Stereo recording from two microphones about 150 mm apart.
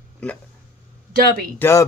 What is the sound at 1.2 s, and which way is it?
Speech, 90° right.